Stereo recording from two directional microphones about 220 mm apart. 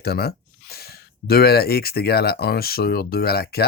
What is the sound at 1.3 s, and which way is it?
Speech, 45° left (ahead or behind).